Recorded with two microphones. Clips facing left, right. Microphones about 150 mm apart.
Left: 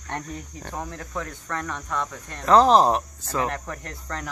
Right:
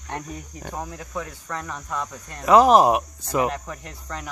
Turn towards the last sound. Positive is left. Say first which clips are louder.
# left 1 dB
turn(degrees=-10)  # may be behind; listen again after turning